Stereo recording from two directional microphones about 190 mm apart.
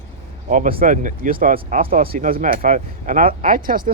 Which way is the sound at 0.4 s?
45° right (ahead or behind).